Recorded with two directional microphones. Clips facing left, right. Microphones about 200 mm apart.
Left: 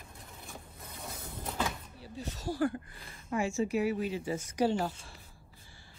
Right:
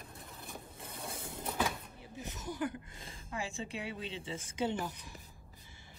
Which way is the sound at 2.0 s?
20° right (ahead or behind).